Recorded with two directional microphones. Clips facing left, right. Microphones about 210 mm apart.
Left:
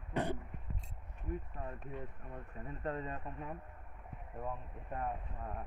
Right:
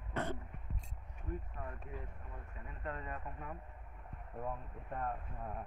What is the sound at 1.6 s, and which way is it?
Speech, 30° left (ahead or behind).